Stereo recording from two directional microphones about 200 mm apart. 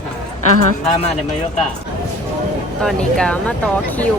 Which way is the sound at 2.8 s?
5° left (ahead or behind).